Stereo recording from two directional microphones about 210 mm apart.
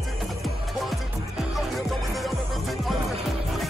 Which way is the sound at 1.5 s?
Centre (ahead or behind).